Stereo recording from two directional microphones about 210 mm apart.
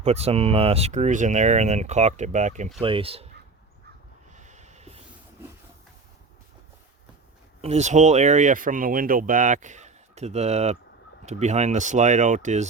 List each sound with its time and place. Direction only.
0.0 s speech: 30° right (ahead or behind)
4.3 s a sound: 35° right (ahead or behind)
7.6 s speech: 30° right (ahead or behind)